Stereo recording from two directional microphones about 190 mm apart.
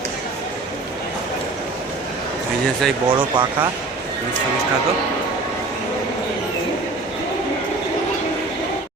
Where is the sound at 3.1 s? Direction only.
20° right (ahead or behind).